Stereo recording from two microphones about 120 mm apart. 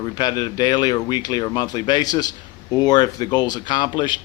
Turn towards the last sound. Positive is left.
turn(degrees=40)  # may be behind; listen again after turning